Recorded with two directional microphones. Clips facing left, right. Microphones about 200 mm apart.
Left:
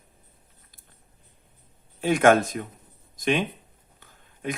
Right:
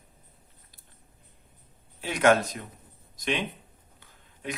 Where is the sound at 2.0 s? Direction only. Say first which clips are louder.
Left 4 dB; 50° left (ahead or behind).